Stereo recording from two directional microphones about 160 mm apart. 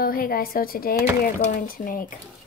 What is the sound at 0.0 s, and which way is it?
A woman's voice, 65° left (ahead or behind).